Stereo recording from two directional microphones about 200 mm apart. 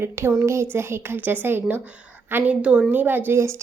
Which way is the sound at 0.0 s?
15° right (ahead or behind).